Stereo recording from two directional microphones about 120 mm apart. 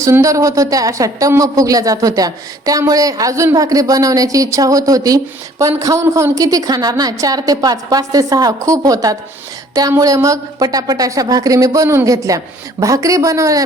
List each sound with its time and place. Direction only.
0.0 s speech: 25° right (ahead or behind)